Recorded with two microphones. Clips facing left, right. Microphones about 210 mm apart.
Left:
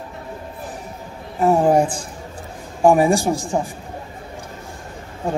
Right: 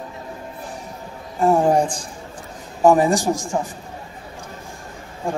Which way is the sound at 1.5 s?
5° left (ahead or behind).